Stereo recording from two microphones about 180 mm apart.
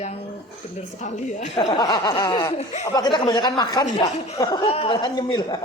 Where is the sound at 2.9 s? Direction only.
25° left (ahead or behind).